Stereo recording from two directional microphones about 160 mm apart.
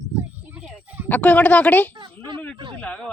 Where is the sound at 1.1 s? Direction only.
10° left (ahead or behind).